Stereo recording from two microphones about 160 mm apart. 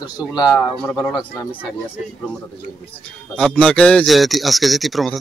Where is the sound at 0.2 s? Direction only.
5° right (ahead or behind).